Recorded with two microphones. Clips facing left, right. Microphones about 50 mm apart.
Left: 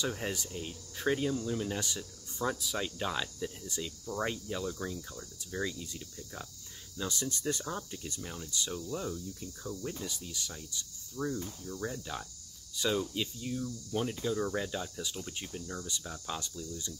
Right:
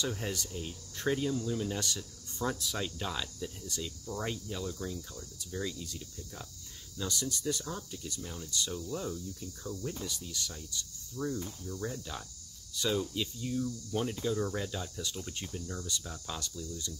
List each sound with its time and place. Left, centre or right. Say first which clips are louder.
0.0 s speech: left 1 dB; centre
8.8 s speech: even; centre